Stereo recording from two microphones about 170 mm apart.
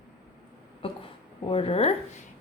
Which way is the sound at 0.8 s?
30° left (ahead or behind).